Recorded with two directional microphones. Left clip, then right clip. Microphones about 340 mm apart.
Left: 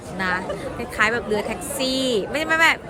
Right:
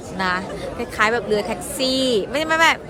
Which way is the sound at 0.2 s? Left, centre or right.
Centre.